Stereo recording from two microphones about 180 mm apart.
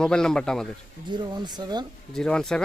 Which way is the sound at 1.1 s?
25° right (ahead or behind).